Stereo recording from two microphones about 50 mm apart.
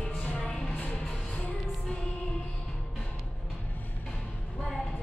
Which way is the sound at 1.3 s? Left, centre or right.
Left.